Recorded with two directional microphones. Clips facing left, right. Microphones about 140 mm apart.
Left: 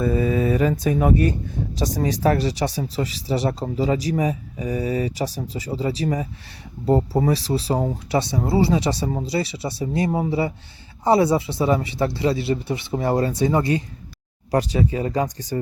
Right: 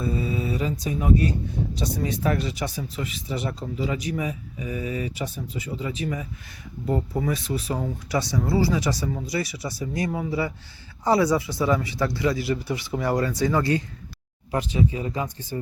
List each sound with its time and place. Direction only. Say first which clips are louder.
0.0 s speech: left 7 dB; 55° left (ahead or behind)
2.2 s speech: left 7 dB; 35° left (ahead or behind)
14.5 s speech: left 4 dB; 40° left (ahead or behind)